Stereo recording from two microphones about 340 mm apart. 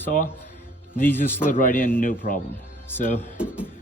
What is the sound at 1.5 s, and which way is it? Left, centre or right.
Speech, left.